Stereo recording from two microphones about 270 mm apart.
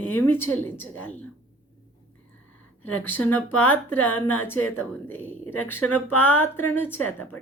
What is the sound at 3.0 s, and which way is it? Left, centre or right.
A woman's voice, centre.